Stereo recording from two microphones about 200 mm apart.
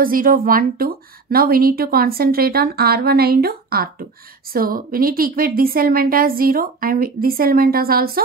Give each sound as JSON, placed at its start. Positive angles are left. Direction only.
{"t": 0.0, "sound": "speech", "side_deg": -45}